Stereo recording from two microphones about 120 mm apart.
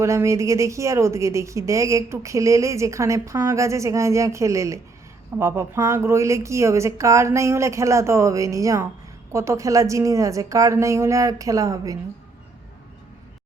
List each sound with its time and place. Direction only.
0.0 s a woman's voice: 25° right (ahead or behind)